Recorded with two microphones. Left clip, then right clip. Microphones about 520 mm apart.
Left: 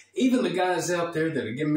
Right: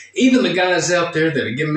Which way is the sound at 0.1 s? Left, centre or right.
Left.